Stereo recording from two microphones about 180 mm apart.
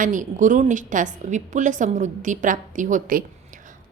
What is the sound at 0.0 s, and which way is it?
A woman's voice, 45° right (ahead or behind).